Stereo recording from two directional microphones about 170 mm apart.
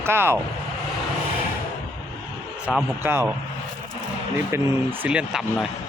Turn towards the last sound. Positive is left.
turn(degrees=-5)  # may be behind; listen again after turning